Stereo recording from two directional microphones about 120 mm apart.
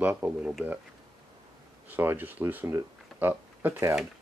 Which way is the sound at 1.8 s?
15° right (ahead or behind).